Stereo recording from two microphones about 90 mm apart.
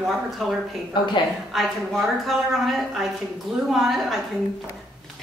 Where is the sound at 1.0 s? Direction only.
60° left (ahead or behind).